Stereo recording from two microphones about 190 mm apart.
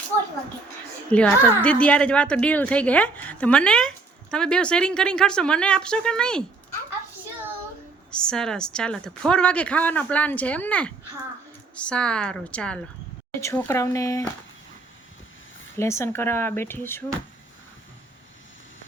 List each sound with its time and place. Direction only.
1.1 s a woman's voice: 5° left (ahead or behind)
8.1 s a woman's voice: 5° left (ahead or behind)
15.7 s a woman's voice: 15° left (ahead or behind)